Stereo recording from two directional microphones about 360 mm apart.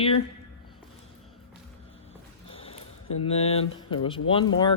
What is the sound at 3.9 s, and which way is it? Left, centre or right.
Speech, centre.